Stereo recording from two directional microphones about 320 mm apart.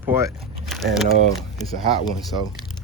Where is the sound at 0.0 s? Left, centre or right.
Centre.